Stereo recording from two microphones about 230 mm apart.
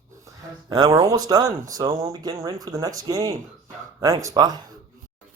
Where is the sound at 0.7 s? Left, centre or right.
Centre.